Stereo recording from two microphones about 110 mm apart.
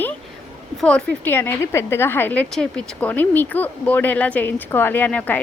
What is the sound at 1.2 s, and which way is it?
A woman's voice, 20° left (ahead or behind).